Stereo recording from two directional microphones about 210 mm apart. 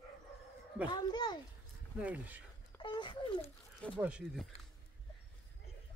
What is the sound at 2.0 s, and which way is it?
Speech, 5° right (ahead or behind).